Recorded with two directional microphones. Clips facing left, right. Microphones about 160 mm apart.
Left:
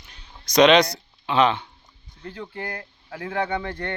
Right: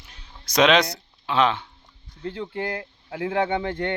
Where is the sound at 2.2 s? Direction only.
25° right (ahead or behind).